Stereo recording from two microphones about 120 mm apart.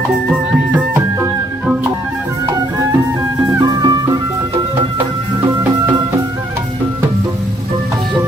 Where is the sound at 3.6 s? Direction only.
30° right (ahead or behind).